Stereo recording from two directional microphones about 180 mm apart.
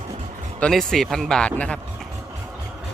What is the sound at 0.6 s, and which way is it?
Speech, centre (ahead or behind).